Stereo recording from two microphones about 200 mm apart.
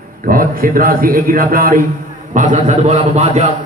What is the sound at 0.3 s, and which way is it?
A man's voice, 45° right (ahead or behind).